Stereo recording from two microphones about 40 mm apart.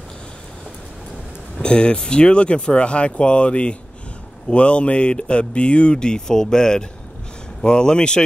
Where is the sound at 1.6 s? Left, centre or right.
Left.